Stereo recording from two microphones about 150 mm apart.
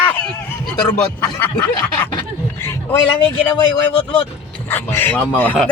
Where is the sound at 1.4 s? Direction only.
10° left (ahead or behind).